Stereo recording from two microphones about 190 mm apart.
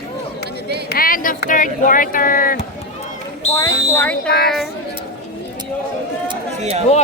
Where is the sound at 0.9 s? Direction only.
50° left (ahead or behind).